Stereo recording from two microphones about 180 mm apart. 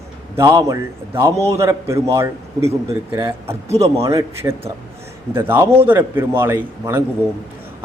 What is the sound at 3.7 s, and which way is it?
Speech, 35° right (ahead or behind).